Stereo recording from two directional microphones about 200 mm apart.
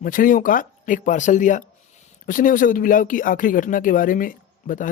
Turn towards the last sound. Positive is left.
turn(degrees=40)  # may be behind; listen again after turning